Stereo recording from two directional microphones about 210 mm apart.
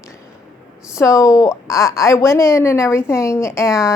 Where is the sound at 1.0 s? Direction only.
15° left (ahead or behind).